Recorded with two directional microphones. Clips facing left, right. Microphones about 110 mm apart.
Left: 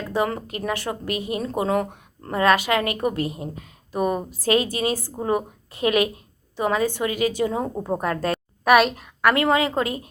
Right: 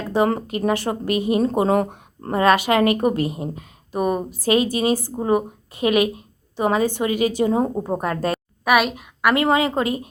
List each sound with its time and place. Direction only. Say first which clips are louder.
0.1 s a woman's voice: right 5 dB; 30° right (ahead or behind)
2.4 s a woman's voice: right 3 dB; 20° right (ahead or behind)
7.8 s speech: right 2 dB; 10° right (ahead or behind)
8.3 s a sound: left 2 dB; 5° right (ahead or behind)
9.3 s a woman's voice: right 3 dB; 20° right (ahead or behind)